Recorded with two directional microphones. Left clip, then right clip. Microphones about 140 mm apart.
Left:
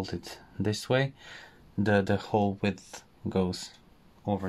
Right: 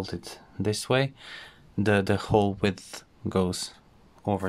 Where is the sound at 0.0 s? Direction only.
10° right (ahead or behind).